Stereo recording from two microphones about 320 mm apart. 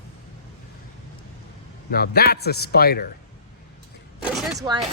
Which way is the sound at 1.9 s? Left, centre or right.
Left.